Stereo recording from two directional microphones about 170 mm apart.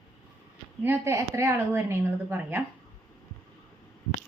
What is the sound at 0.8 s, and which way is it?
Speech, 15° right (ahead or behind).